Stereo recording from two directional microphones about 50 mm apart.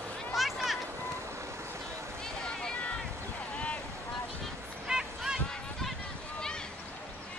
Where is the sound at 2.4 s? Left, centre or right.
Centre.